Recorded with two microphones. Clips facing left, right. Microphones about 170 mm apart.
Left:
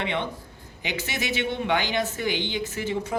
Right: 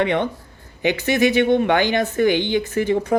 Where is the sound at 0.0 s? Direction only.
50° right (ahead or behind).